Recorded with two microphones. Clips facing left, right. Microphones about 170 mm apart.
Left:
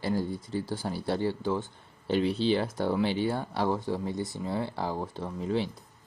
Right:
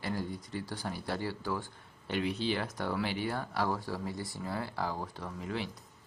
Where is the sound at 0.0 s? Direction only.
30° left (ahead or behind).